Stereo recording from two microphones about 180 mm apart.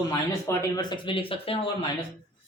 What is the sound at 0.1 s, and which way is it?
Speech, 20° left (ahead or behind).